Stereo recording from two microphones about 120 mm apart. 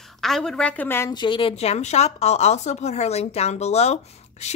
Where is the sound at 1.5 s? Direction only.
65° left (ahead or behind).